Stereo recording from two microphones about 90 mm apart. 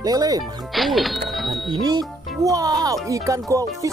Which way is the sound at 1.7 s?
50° right (ahead or behind).